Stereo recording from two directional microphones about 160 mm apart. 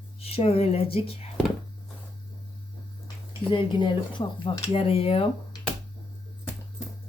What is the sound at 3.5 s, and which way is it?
Speech, 30° left (ahead or behind).